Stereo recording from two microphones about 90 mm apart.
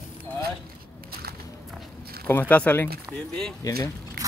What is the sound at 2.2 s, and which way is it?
Speech, 20° left (ahead or behind).